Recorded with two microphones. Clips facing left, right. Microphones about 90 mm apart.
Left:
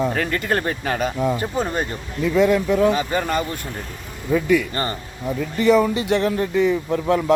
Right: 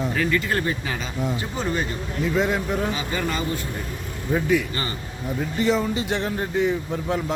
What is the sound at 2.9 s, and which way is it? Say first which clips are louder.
Speech: left 5 dB; 45° left (ahead or behind).